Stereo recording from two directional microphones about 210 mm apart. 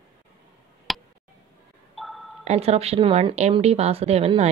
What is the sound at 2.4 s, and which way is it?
Speech, 30° right (ahead or behind).